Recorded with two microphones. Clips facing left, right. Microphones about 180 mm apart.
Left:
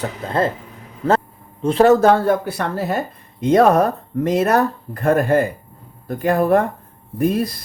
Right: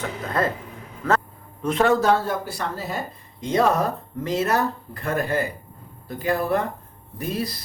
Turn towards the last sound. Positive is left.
turn(degrees=55)  # may be behind; listen again after turning